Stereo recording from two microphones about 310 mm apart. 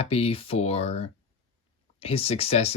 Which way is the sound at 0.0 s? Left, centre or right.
Centre.